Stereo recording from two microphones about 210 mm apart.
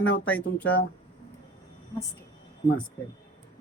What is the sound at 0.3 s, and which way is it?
Speech, 5° left (ahead or behind).